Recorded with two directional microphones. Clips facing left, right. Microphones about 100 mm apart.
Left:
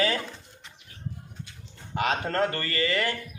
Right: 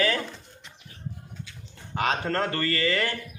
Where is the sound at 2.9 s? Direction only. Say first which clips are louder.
Right 1 dB; 35° right (ahead or behind).